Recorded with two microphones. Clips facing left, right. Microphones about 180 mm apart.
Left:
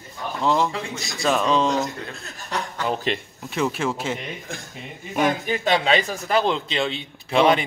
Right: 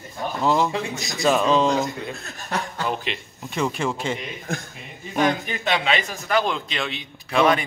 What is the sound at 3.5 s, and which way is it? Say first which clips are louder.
Speech: left 1 dB; centre (ahead or behind).